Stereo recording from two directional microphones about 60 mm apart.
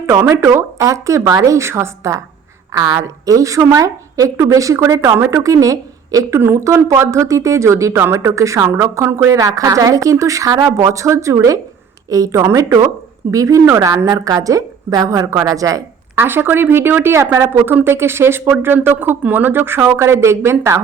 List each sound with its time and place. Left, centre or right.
0.0 s a woman's voice: right
2.7 s a woman's voice: right
5.1 s speech: right
5.4 s a woman's voice: right
6.4 s a woman's voice: right
9.0 s speech: right
9.3 s a woman's voice: right
12.5 s a woman's voice: right
13.3 s a woman's voice: right
13.7 s a woman's voice: right
16.1 s speech: right
17.6 s speech: right
17.8 s speech: right